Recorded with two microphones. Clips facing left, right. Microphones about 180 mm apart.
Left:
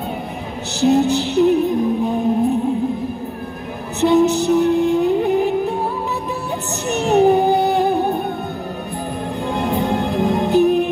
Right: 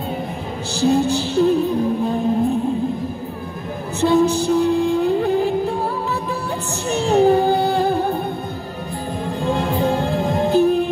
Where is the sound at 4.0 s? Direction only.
20° left (ahead or behind).